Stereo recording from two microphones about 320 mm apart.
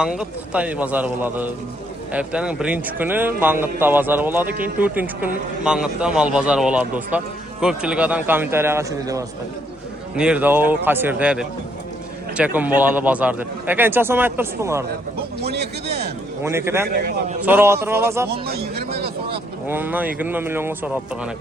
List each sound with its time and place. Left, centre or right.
0.0 s a man's voice: centre
15.4 s a sound: right
16.4 s a man's voice: centre
16.9 s a man's voice: right
17.4 s a man's voice: centre
18.3 s a sound: right
19.3 s speech: centre